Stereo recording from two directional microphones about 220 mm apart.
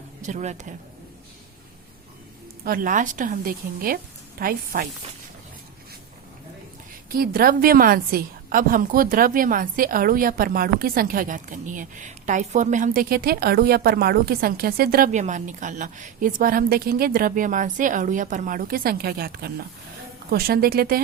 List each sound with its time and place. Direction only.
0.2 s a woman's voice: 35° right (ahead or behind)
2.6 s a woman's voice: 40° right (ahead or behind)
7.1 s a woman's voice: 40° right (ahead or behind)